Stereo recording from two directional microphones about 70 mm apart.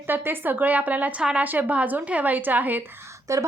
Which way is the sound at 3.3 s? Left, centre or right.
Right.